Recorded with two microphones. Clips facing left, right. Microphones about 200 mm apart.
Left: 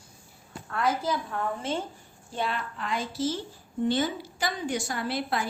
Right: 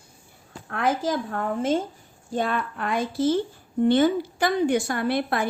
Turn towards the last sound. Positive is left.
turn(degrees=-55)  # may be behind; listen again after turning